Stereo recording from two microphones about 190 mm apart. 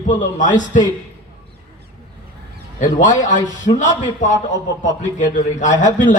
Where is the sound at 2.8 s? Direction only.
40° left (ahead or behind).